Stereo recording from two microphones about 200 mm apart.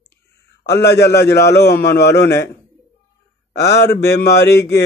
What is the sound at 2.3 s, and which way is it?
Speech, 15° left (ahead or behind).